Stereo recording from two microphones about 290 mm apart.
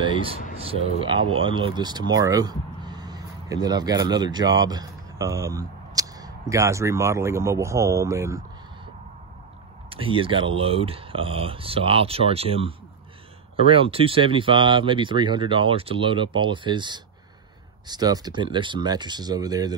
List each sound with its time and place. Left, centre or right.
0.0 s a sound: centre
0.7 s speech: centre
9.8 s speech: centre